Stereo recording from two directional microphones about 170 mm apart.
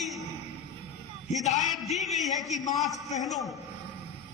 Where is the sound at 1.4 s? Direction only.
40° left (ahead or behind).